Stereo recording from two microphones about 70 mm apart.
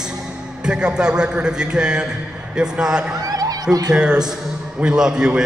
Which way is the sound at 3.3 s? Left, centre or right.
Right.